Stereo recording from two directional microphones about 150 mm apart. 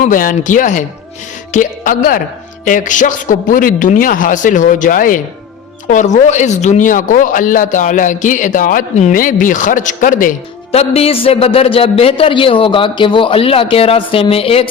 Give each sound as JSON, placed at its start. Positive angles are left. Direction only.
{"t": 0.0, "sound": "speech", "side_deg": 65}
{"t": 2.6, "sound": "speech", "side_deg": 60}
{"t": 10.7, "sound": "a man's voice", "side_deg": 40}